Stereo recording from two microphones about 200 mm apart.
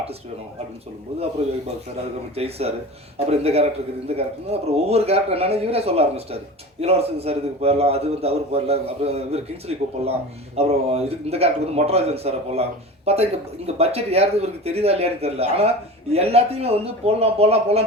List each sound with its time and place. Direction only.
2.3 s a man's voice: 30° right (ahead or behind)